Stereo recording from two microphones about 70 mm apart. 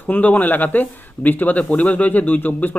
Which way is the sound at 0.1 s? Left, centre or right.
Left.